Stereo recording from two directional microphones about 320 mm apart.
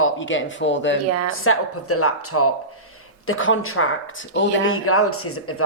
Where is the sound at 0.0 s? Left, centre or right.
Left.